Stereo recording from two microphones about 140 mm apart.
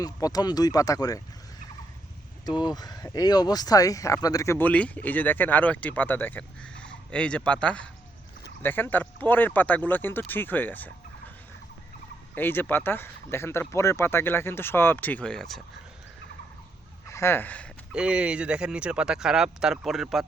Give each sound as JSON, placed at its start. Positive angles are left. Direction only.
{"t": 0.0, "sound": "speech", "side_deg": 25}
{"t": 2.5, "sound": "speech", "side_deg": 30}
{"t": 12.3, "sound": "speech", "side_deg": 15}
{"t": 17.1, "sound": "speech", "side_deg": 20}
{"t": 17.9, "sound": "speech", "side_deg": -5}